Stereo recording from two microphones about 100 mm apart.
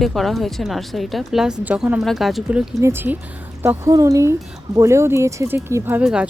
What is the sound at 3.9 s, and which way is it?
Speech, 35° right (ahead or behind).